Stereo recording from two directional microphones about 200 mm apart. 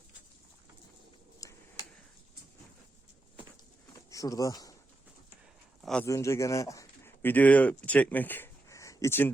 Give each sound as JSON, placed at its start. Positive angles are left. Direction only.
{"t": 1.4, "sound": "tick-tock", "side_deg": 15}
{"t": 4.1, "sound": "speech", "side_deg": 15}
{"t": 5.8, "sound": "speech", "side_deg": 5}
{"t": 6.1, "sound": "speech", "side_deg": 15}